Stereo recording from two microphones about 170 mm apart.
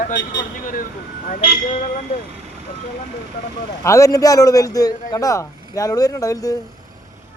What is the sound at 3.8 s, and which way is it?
A man's voice, 20° left (ahead or behind).